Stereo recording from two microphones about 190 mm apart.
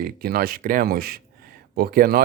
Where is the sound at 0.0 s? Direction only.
50° right (ahead or behind).